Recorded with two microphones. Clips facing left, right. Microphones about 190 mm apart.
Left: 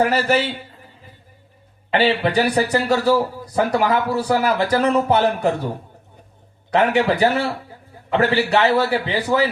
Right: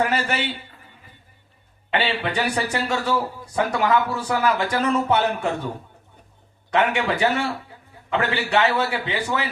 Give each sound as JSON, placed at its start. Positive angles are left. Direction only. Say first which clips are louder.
{"t": 0.0, "sound": "speech", "louder": "left 5 dB", "side_deg": 35}
{"t": 1.9, "sound": "speech", "louder": "left 6 dB", "side_deg": 35}
{"t": 6.7, "sound": "speech", "louder": "left 4 dB", "side_deg": 35}